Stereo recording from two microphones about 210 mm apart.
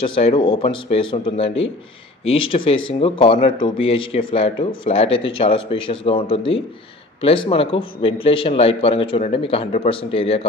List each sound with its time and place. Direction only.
0.0 s speech: 25° left (ahead or behind)